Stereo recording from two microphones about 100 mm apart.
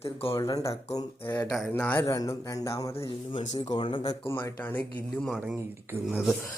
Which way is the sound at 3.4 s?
55° left (ahead or behind).